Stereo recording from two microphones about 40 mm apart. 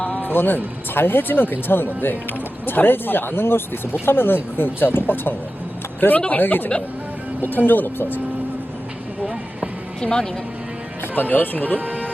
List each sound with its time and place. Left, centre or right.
0.2 s speech: left
6.1 s speech: left
10.0 s speech: centre
11.1 s speech: left
11.8 s music: right